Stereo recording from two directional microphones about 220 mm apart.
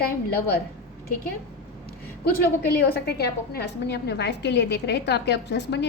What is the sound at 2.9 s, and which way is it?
A woman's voice, 45° left (ahead or behind).